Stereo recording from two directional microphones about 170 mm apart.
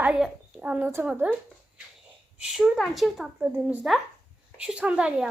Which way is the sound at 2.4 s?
5° right (ahead or behind).